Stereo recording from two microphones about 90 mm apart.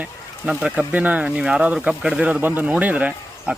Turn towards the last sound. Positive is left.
turn(degrees=-15)  # may be behind; listen again after turning